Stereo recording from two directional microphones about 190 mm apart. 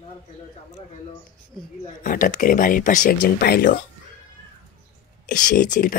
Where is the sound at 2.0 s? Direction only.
45° left (ahead or behind).